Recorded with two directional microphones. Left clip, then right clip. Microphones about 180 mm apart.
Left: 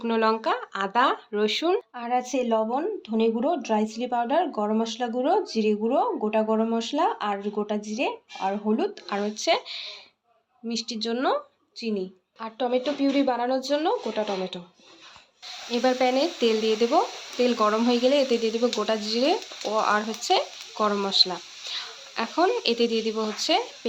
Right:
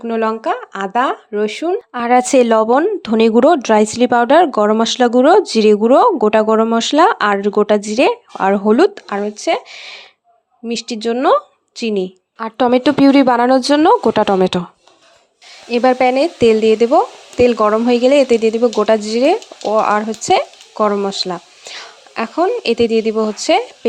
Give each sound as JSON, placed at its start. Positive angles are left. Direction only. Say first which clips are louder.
{"t": 0.0, "sound": "speech", "louder": "right 6 dB", "side_deg": -30}
{"t": 1.9, "sound": "a woman's voice", "louder": "right 14 dB", "side_deg": -55}
{"t": 9.0, "sound": "speech", "louder": "right 7 dB", "side_deg": -35}
{"t": 11.8, "sound": "a woman's voice", "louder": "right 12 dB", "side_deg": -55}
{"t": 15.7, "sound": "speech", "louder": "right 10 dB", "side_deg": -45}
{"t": 21.1, "sound": "a sound", "louder": "right 1 dB", "side_deg": -40}
{"t": 22.6, "sound": "speech", "louder": "right 10 dB", "side_deg": -40}